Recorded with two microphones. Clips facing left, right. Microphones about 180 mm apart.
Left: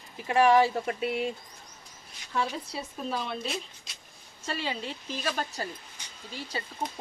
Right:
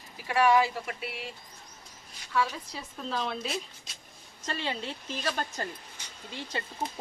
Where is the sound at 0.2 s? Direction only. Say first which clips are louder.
Left 2 dB; 25° left (ahead or behind).